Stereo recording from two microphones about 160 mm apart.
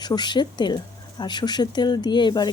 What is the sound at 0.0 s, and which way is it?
Speech, 25° left (ahead or behind).